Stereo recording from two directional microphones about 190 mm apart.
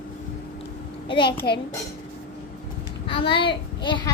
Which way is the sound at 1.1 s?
25° left (ahead or behind).